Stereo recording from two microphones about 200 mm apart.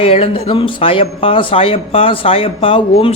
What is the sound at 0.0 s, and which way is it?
Speech, 30° left (ahead or behind).